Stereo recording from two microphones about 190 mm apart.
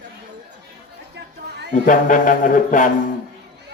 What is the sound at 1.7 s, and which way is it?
Speech, 45° left (ahead or behind).